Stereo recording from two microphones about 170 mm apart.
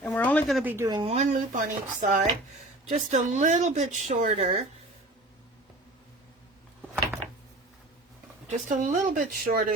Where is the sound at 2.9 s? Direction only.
45° right (ahead or behind).